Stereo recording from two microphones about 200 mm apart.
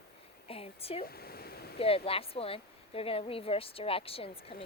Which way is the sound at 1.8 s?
30° left (ahead or behind).